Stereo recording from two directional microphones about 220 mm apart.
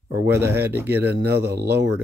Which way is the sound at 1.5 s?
50° right (ahead or behind).